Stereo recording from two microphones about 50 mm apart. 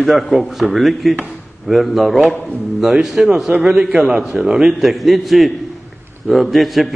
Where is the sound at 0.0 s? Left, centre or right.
Centre.